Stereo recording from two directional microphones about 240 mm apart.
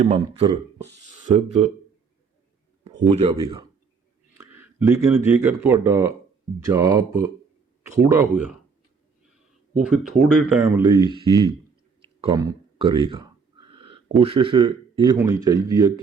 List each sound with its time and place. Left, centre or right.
0.0 s speech: right
3.1 s speech: right
4.4 s speech: centre
9.8 s speech: centre
12.0 s a sound: centre
14.2 s speech: right